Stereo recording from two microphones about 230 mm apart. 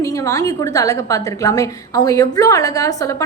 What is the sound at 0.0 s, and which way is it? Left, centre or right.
A woman's voice, centre.